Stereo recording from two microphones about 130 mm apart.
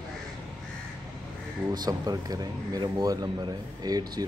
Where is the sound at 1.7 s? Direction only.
30° right (ahead or behind).